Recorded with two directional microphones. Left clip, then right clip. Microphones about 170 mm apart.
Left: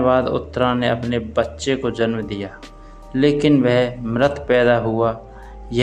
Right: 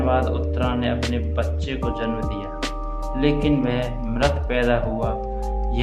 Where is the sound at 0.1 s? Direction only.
45° left (ahead or behind).